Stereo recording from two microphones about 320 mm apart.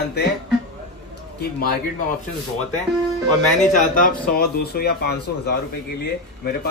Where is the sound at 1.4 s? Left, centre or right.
Left.